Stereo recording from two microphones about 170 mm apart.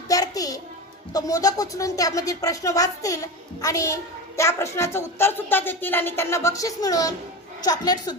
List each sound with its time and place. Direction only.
0.1 s music: 20° left (ahead or behind)
1.1 s a child's voice: 20° left (ahead or behind)